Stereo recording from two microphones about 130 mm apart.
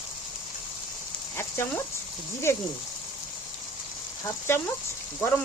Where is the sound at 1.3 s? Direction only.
20° left (ahead or behind).